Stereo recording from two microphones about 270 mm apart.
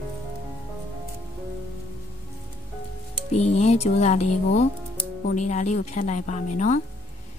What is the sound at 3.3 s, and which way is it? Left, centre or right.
Speech, left.